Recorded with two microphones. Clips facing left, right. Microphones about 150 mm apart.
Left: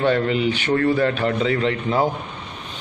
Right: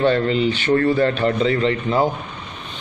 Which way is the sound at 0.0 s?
10° left (ahead or behind).